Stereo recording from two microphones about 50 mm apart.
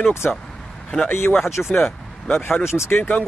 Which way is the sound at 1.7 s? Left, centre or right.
Centre.